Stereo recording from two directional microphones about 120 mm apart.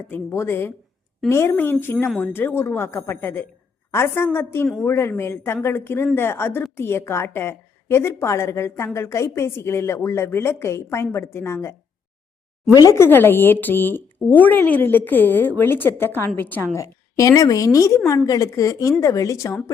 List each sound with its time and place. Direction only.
0.1 s a woman's voice: 20° left (ahead or behind)
12.7 s speech: 25° left (ahead or behind)
16.7 s a woman's voice: 30° left (ahead or behind)